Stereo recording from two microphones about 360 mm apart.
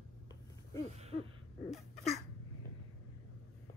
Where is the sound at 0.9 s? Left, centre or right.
Centre.